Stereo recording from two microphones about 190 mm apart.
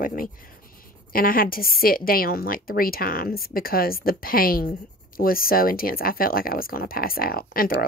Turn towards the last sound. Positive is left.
turn(degrees=50)  # may be behind; listen again after turning